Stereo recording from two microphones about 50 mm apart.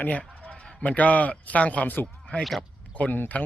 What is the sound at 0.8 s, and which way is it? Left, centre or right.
A man's voice, left.